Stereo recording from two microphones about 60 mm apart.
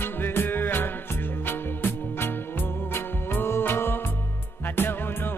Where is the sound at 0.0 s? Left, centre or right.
Left.